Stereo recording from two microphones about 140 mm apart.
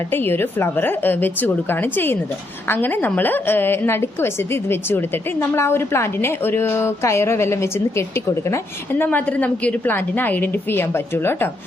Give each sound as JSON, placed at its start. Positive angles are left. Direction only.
{"t": 0.1, "sound": "a woman's voice", "side_deg": 15}